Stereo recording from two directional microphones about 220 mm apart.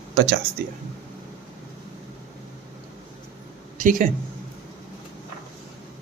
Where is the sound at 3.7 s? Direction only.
35° right (ahead or behind).